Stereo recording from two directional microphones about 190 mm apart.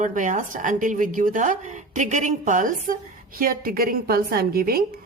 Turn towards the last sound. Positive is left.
turn(degrees=-50)  # may be behind; listen again after turning